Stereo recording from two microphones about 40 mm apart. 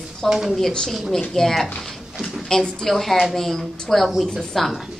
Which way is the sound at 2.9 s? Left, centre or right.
Centre.